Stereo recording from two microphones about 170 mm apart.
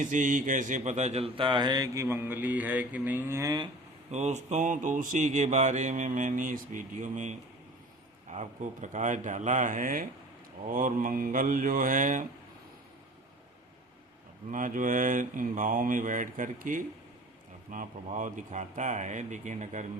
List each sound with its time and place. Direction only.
0.0 s speech: 50° right (ahead or behind); by 3.7 s 20° right (ahead or behind)
4.1 s mantra: 40° right (ahead or behind)
14.5 s mantra: 50° right (ahead or behind)